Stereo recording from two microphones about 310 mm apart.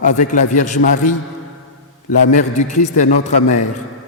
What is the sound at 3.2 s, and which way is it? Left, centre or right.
Speech, left.